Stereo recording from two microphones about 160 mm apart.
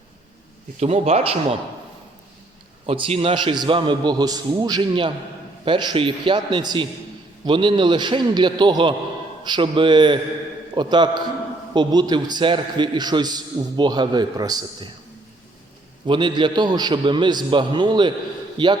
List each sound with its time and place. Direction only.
0.8 s a man's voice: 40° right (ahead or behind)
2.8 s a man's voice: 35° right (ahead or behind)
16.0 s a man's voice: 30° right (ahead or behind)